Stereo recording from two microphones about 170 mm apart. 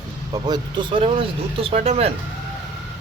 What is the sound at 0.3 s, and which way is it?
Speech, 25° right (ahead or behind).